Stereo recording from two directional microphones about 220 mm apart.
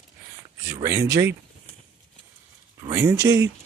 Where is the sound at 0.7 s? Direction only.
15° right (ahead or behind).